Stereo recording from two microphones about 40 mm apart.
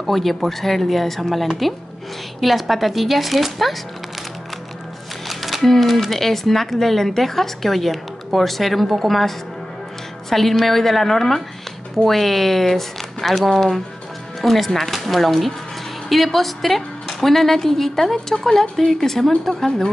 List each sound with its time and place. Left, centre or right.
0.0 s speech: centre
5.3 s a sound: centre
5.7 s speech: centre
10.3 s a woman's voice: centre